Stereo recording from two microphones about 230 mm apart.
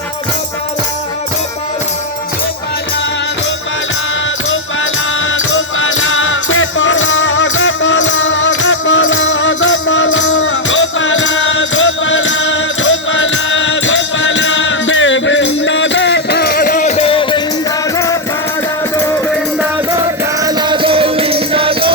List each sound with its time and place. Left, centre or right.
5.3 s music: left; by 18.2 s centre
20.0 s music: centre